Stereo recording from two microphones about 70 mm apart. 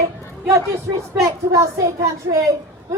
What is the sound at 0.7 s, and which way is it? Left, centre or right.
A man's voice, right.